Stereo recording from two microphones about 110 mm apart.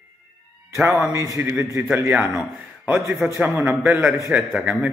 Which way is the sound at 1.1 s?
30° right (ahead or behind).